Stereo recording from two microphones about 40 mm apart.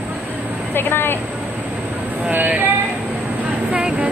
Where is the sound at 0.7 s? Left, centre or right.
Left.